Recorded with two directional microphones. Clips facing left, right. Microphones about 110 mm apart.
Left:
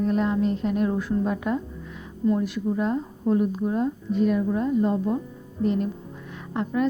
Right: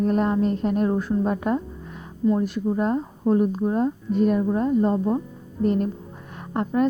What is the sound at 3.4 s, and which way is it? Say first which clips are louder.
A woman's voice: right 2 dB; 40° right (ahead or behind).